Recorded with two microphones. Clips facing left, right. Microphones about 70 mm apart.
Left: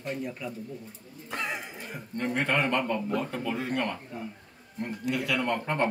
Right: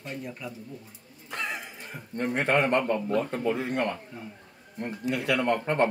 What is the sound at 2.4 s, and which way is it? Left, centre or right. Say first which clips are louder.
Speech: right 3 dB; right.